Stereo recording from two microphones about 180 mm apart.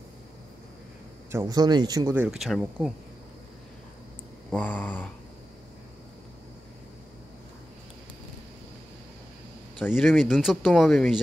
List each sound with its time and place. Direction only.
1.3 s speech: 20° right (ahead or behind)
2.2 s speech: centre (ahead or behind)
4.5 s a sound: 10° left (ahead or behind)
9.9 s speech: centre (ahead or behind)